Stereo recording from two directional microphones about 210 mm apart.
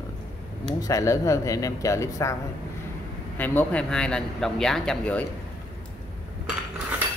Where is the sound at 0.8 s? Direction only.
15° left (ahead or behind).